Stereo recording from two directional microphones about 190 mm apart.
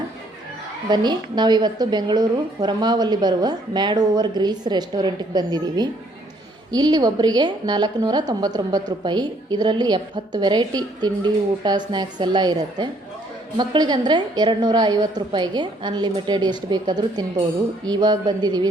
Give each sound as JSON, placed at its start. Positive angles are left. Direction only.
{"t": 0.9, "sound": "a woman's voice", "side_deg": -20}